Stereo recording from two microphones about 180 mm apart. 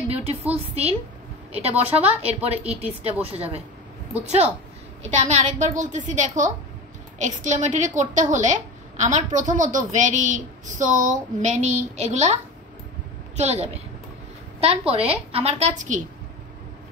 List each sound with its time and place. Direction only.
0.1 s a woman's voice: 35° right (ahead or behind)
5.0 s a woman's voice: 40° right (ahead or behind)
13.4 s a woman's voice: 35° right (ahead or behind)